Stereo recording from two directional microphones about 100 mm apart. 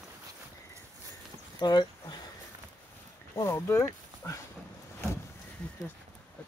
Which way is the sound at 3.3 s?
30° left (ahead or behind).